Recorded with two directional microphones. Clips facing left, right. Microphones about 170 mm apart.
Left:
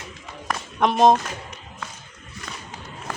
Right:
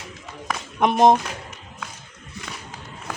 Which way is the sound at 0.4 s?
15° right (ahead or behind).